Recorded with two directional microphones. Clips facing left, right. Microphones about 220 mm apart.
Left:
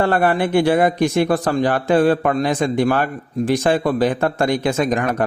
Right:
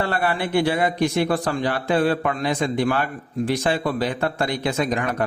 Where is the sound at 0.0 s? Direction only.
45° left (ahead or behind).